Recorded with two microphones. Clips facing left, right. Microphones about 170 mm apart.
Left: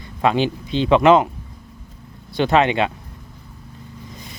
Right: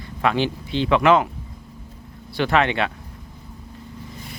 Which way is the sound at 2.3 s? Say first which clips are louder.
Left 3 dB; 20° left (ahead or behind).